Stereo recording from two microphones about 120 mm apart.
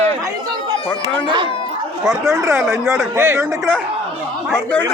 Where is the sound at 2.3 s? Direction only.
25° right (ahead or behind).